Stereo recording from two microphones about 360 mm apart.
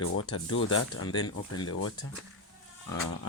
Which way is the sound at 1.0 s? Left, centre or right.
Centre.